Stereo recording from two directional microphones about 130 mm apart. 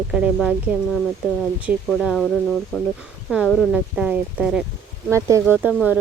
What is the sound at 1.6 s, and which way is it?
Speech, 5° right (ahead or behind).